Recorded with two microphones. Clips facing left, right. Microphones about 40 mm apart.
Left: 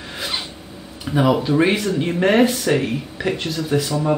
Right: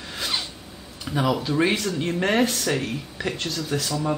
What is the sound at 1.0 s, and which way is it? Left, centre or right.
Speech, centre.